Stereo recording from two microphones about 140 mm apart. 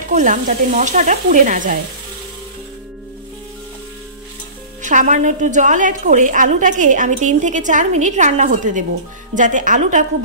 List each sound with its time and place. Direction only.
0.1 s a woman's voice: 65° right (ahead or behind)
4.8 s a woman's voice: 65° right (ahead or behind)